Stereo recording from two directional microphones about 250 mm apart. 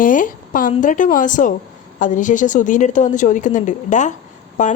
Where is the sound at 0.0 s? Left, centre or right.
Left.